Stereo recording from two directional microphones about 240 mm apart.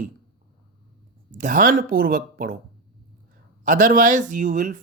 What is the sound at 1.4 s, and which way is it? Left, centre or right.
Speech, right.